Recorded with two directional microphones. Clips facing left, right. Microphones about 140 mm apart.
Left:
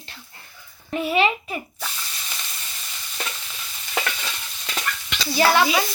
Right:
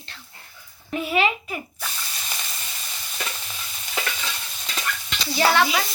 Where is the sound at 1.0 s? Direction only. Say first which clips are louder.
Left 2 dB; centre (ahead or behind).